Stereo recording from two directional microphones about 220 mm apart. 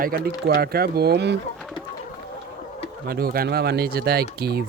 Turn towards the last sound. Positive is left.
turn(degrees=-45)  # may be behind; listen again after turning